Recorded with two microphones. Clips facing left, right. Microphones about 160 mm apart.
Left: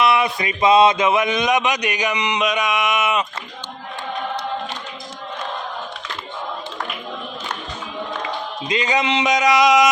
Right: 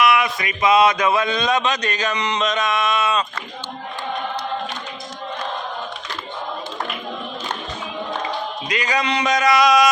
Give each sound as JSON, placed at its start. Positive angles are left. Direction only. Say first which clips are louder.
{"t": 0.0, "sound": "speech", "louder": "even", "side_deg": 30}
{"t": 8.6, "sound": "speech", "louder": "left 3 dB", "side_deg": 25}